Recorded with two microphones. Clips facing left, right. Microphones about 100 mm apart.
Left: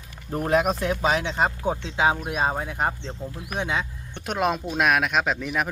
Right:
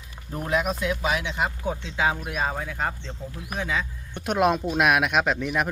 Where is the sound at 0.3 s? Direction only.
40° left (ahead or behind); by 3.8 s 25° left (ahead or behind).